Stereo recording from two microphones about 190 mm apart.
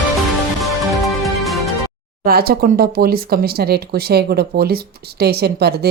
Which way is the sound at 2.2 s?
55° right (ahead or behind).